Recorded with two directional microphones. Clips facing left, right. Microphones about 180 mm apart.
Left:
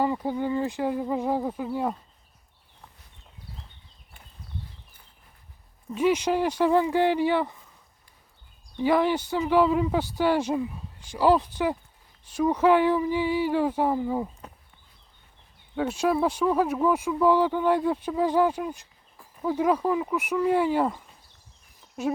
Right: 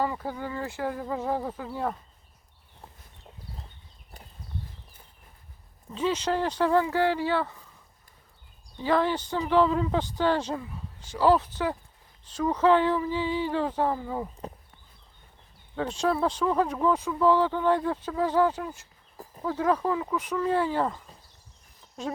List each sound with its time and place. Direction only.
0.0 s speech: 20° left (ahead or behind)
5.9 s speech: 10° left (ahead or behind)
8.8 s speech: 15° left (ahead or behind)
15.7 s speech: 10° left (ahead or behind)